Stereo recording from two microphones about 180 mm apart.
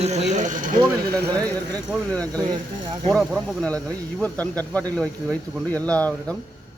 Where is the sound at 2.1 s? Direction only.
5° left (ahead or behind).